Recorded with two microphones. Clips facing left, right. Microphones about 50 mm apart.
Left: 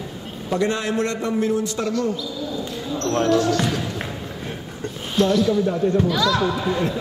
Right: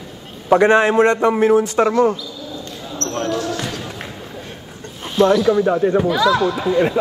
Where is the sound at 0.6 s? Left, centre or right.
Right.